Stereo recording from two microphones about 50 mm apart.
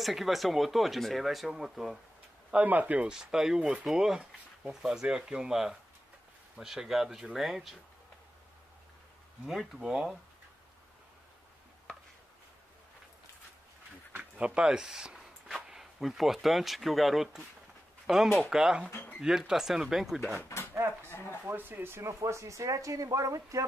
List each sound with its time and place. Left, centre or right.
0.0 s speech: centre
2.5 s speech: right
3.1 s speech: centre
9.5 s speech: centre
14.4 s speech: centre
21.1 s a sound: left
21.5 s speech: right
21.9 s speech: right